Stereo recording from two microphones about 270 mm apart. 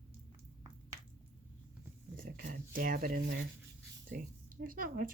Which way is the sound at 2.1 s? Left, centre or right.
Right.